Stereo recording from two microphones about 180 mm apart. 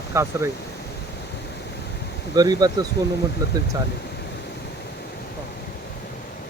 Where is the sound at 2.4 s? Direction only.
20° right (ahead or behind).